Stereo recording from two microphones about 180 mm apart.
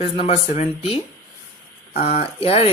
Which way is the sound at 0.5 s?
35° left (ahead or behind).